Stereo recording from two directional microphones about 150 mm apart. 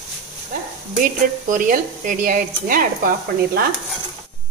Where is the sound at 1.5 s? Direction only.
65° right (ahead or behind).